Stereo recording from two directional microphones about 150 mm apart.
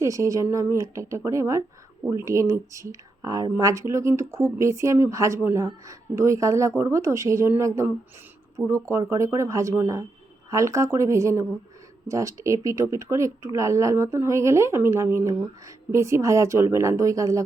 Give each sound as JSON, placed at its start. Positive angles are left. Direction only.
{"t": 0.0, "sound": "speech", "side_deg": -20}